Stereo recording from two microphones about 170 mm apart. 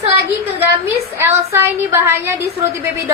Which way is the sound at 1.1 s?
15° right (ahead or behind).